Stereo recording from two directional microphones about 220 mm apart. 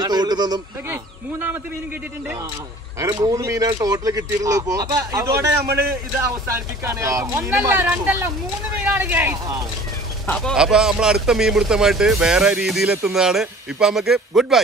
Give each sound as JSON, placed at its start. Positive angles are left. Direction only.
{"t": 0.0, "sound": "speech", "side_deg": -20}
{"t": 3.0, "sound": "speech", "side_deg": -15}
{"t": 5.6, "sound": "speech", "side_deg": -45}
{"t": 6.8, "sound": "speech", "side_deg": -15}
{"t": 10.2, "sound": "speech", "side_deg": 5}